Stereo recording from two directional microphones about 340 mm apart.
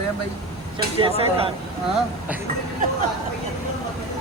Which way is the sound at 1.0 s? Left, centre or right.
Centre.